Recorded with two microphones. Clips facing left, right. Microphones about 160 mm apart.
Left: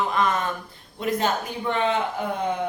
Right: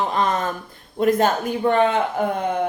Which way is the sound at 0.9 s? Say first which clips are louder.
Right 6 dB; 50° right (ahead or behind).